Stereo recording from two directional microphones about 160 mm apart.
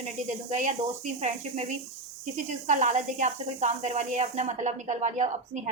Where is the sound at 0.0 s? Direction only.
50° right (ahead or behind).